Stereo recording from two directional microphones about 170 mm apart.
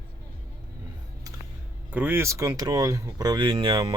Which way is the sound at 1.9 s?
10° right (ahead or behind).